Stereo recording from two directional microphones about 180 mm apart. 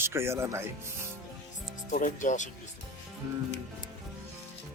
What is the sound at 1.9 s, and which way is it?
Speech, 45° left (ahead or behind).